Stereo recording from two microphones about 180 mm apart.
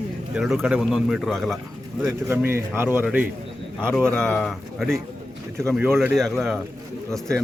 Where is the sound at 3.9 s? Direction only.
5° left (ahead or behind).